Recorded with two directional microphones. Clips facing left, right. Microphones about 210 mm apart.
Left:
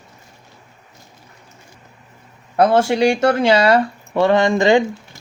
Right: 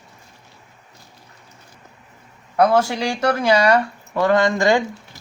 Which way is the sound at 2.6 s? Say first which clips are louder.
Left 3 dB; 25° left (ahead or behind).